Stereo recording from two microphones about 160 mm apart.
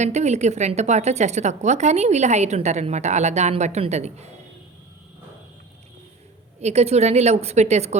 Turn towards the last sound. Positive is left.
turn(degrees=-45)  # may be behind; listen again after turning